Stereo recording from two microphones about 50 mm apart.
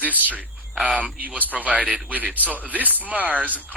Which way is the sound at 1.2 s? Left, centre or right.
Right.